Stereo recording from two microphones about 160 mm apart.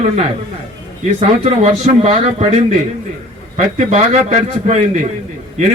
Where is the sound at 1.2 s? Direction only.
45° right (ahead or behind).